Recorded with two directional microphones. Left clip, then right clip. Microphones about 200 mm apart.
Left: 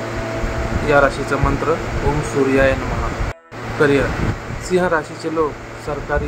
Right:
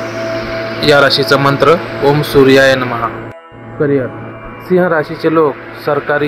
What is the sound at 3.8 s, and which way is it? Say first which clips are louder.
Speech: right 1 dB; 10° right (ahead or behind).